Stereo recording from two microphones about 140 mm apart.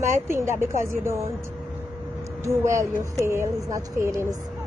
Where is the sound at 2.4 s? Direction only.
20° right (ahead or behind).